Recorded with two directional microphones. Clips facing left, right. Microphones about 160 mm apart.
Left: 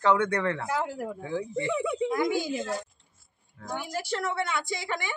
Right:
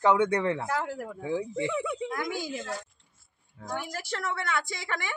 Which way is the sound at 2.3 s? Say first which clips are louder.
Left 5 dB; 25° left (ahead or behind).